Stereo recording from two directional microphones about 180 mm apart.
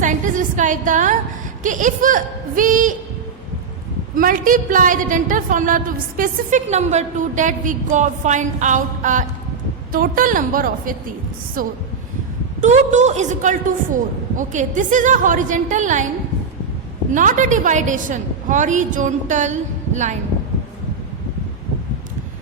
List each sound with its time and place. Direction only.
0.0 s a woman's voice: 45° right (ahead or behind)
4.1 s a woman's voice: 50° right (ahead or behind)
12.6 s a woman's voice: 40° right (ahead or behind)
17.1 s a woman's voice: 45° right (ahead or behind)